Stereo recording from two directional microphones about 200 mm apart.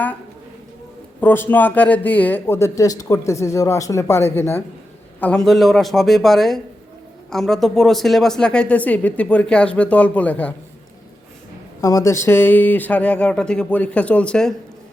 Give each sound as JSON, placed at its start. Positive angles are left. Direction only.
{"t": 1.2, "sound": "speech", "side_deg": 10}
{"t": 11.8, "sound": "speech", "side_deg": 15}